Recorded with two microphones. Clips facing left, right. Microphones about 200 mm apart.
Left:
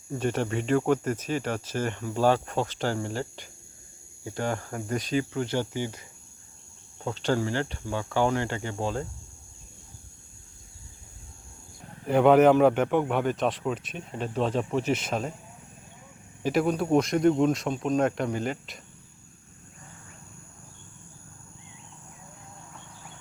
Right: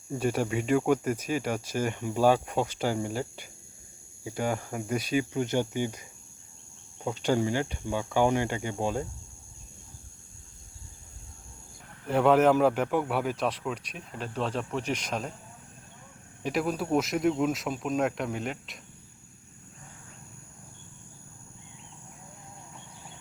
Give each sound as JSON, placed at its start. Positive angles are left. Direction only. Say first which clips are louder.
{"t": 0.1, "sound": "speech", "louder": "even", "side_deg": -10}
{"t": 7.0, "sound": "speech", "louder": "even", "side_deg": -15}
{"t": 12.0, "sound": "speech", "louder": "left 3 dB", "side_deg": 0}
{"t": 14.5, "sound": "speech", "louder": "left 5 dB", "side_deg": 30}
{"t": 14.8, "sound": "speech", "louder": "left 4 dB", "side_deg": 5}
{"t": 16.4, "sound": "speech", "louder": "left 4 dB", "side_deg": 0}